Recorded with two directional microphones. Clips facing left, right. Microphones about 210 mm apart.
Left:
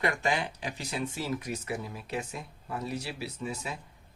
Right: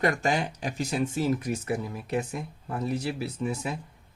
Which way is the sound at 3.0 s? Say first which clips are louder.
Right 6 dB; 55° right (ahead or behind).